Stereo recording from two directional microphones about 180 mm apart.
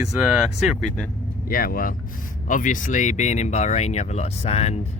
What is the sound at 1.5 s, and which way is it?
Speech, 50° left (ahead or behind).